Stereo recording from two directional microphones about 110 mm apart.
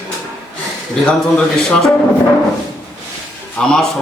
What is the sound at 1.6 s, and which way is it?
Speech, 5° left (ahead or behind).